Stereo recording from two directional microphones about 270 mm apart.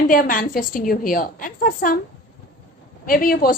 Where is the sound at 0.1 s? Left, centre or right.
Left.